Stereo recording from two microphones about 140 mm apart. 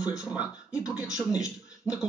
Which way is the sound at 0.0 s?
5° right (ahead or behind).